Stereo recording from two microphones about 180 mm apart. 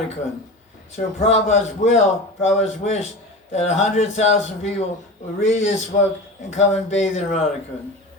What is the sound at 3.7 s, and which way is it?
Speech, 40° left (ahead or behind).